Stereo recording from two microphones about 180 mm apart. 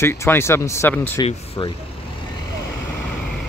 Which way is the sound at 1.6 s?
25° left (ahead or behind).